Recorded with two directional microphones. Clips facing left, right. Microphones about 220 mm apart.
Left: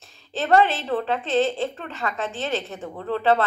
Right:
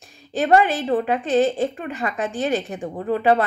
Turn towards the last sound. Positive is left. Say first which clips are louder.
# right 3 dB
turn(degrees=-15)  # may be behind; listen again after turning